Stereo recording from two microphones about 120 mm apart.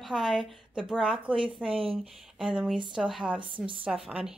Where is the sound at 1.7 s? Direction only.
50° right (ahead or behind).